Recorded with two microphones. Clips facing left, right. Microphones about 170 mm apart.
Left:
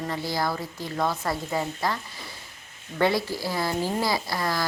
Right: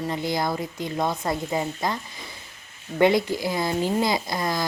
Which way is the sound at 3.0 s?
20° right (ahead or behind).